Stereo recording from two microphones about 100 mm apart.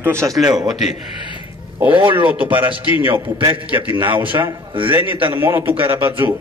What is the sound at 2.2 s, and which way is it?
A man's voice, 15° right (ahead or behind).